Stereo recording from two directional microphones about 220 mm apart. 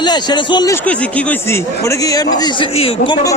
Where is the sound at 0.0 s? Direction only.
20° left (ahead or behind).